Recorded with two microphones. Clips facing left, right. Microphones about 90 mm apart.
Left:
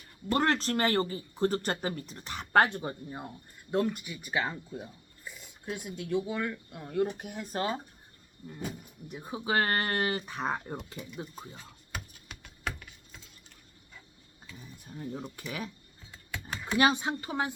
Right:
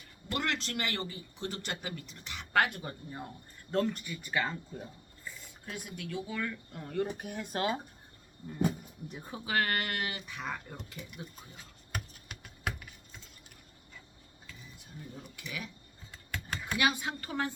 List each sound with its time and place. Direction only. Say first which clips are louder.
0.3 s speech: left 7 dB; 40° left (ahead or behind); by 3.2 s 25° left (ahead or behind)
3.7 s speech: left 2 dB; 10° left (ahead or behind)
9.2 s speech: left 3 dB; 20° left (ahead or behind); by 10.8 s 35° left (ahead or behind)
11.9 s typing: right 1 dB; 5° right (ahead or behind)
15.4 s speech: left 4 dB; 40° left (ahead or behind)
16.1 s a sound: even; centre (ahead or behind)
16.7 s speech: left 5 dB; 30° left (ahead or behind)